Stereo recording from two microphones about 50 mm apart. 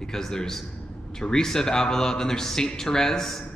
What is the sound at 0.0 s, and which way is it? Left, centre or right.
Speech, centre.